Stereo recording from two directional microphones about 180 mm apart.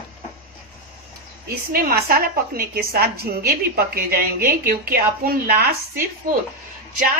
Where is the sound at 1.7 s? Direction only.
55° right (ahead or behind).